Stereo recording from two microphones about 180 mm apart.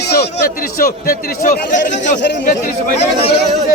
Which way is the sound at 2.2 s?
70° left (ahead or behind).